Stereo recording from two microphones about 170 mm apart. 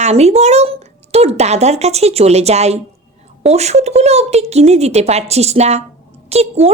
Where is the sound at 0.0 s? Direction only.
40° right (ahead or behind).